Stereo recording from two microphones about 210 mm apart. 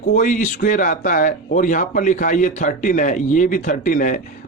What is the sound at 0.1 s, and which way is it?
A man's voice, 35° left (ahead or behind).